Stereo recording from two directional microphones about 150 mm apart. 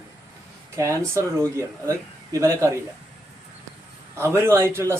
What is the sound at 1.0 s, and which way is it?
Speech, 20° right (ahead or behind).